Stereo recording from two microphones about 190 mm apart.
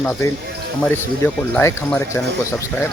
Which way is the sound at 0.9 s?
10° left (ahead or behind).